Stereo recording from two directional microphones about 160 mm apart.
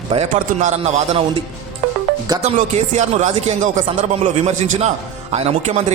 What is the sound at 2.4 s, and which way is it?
Speech, 45° right (ahead or behind).